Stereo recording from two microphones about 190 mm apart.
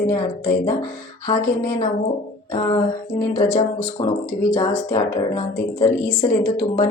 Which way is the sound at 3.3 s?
20° left (ahead or behind).